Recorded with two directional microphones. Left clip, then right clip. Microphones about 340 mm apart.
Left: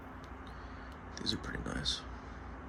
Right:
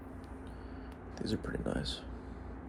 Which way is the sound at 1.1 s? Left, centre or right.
Centre.